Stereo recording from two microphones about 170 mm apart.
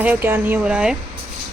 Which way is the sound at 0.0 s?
10° right (ahead or behind).